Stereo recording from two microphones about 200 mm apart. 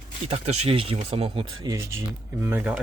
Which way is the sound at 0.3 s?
30° right (ahead or behind).